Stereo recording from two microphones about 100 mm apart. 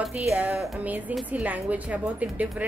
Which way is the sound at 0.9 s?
15° right (ahead or behind).